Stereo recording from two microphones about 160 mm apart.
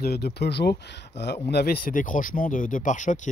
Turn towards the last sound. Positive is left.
turn(degrees=50)  # may be behind; listen again after turning